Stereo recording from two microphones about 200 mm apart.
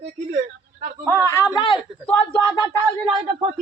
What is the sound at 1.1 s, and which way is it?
A man's voice, 15° left (ahead or behind).